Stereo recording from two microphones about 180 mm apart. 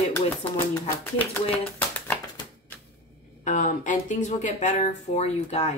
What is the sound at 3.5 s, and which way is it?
Speech, 45° left (ahead or behind).